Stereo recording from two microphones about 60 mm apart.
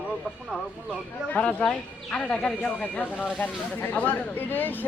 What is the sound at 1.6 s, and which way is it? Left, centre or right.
Speech, centre.